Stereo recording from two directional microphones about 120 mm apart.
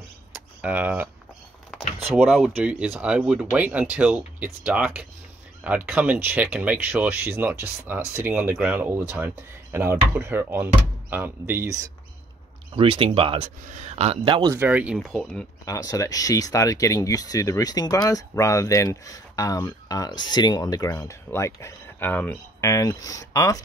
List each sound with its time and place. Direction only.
0.3 s a sound: 15° right (ahead or behind)
2.2 s speech: 5° right (ahead or behind)
12.7 s speech: 45° right (ahead or behind)
13.7 s speech: 70° right (ahead or behind)
14.2 s speech: 45° right (ahead or behind)
14.6 s speech: 10° right (ahead or behind)
15.0 s speech: centre (ahead or behind)
15.6 s speech: 30° left (ahead or behind)
22.6 s speech: 30° left (ahead or behind)